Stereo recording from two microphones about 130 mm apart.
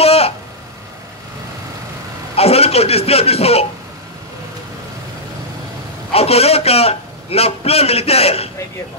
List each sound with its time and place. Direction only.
0.0 s vehicle: 50° left (ahead or behind)
2.3 s a man's voice: 50° left (ahead or behind)
6.1 s a man's voice: 50° left (ahead or behind)